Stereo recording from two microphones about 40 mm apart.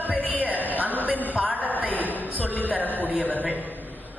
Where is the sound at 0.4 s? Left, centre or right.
Right.